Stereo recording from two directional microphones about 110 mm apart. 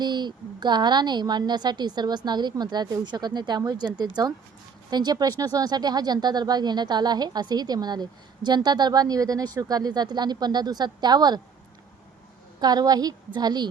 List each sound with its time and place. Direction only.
0.0 s speech: 40° right (ahead or behind)
12.5 s speech: 35° right (ahead or behind)